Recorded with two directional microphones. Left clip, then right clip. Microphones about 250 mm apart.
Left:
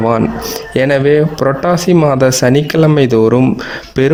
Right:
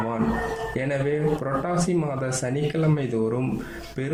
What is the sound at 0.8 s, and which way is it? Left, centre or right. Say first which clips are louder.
A man's voice: left 16 dB; left.